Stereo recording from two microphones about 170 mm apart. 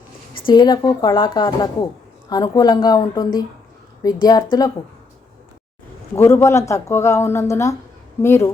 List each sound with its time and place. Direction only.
0.3 s speech: 25° left (ahead or behind)
6.1 s a woman's voice: 15° left (ahead or behind)